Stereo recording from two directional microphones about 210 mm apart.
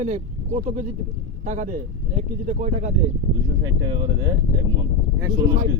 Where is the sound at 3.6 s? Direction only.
20° right (ahead or behind).